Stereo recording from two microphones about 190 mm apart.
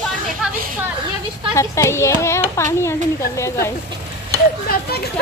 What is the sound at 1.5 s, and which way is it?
Speech, 15° left (ahead or behind).